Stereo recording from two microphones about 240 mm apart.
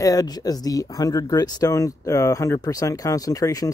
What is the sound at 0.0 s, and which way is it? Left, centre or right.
Speech, centre.